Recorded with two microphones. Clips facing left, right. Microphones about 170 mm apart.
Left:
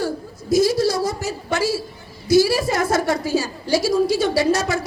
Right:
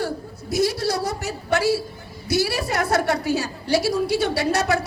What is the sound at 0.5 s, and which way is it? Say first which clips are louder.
A woman's voice: left 5 dB; 65° right (ahead or behind).